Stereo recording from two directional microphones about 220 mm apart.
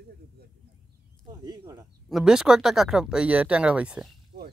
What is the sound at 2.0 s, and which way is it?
Speech, centre (ahead or behind).